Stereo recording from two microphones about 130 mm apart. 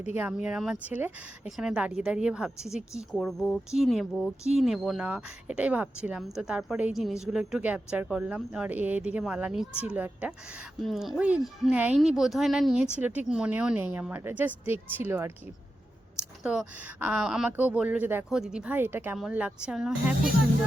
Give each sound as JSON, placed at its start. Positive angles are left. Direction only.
{"t": 0.0, "sound": "a woman's voice", "side_deg": -10}
{"t": 16.4, "sound": "a woman's voice", "side_deg": -5}